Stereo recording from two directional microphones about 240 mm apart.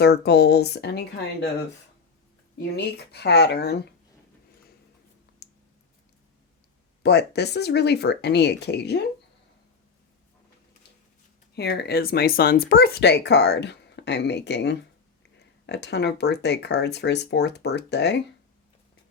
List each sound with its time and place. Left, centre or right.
0.0 s speech: left
2.6 s speech: left
5.4 s a sound: left
7.0 s speech: left
11.5 s speech: left